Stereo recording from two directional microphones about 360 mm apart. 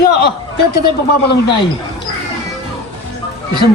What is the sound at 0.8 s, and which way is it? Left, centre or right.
Speech, left.